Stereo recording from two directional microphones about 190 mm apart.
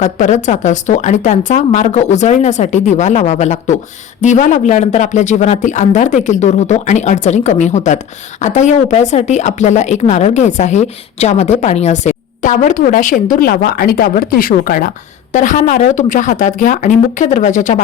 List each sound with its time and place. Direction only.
0.0 s speech: 40° left (ahead or behind)